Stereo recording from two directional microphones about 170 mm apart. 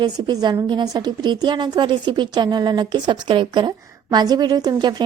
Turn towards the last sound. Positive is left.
turn(degrees=-25)  # may be behind; listen again after turning